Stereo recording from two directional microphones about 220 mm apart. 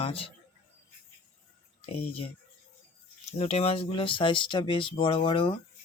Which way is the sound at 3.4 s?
25° left (ahead or behind).